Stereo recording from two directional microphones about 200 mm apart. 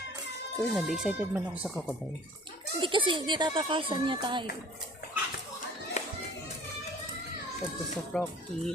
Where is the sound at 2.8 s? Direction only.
25° right (ahead or behind).